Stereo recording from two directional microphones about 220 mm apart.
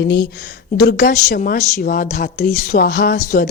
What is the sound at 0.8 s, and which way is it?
A woman's voice, 40° left (ahead or behind).